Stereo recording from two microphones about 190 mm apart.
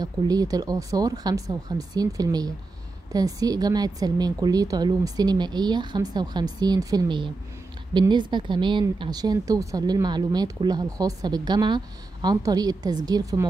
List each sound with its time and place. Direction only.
0.0 s speech: 20° right (ahead or behind)